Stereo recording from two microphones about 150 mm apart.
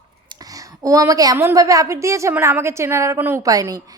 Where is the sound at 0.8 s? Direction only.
20° right (ahead or behind).